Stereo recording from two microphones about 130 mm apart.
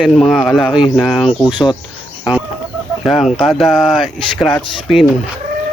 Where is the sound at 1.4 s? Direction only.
35° left (ahead or behind).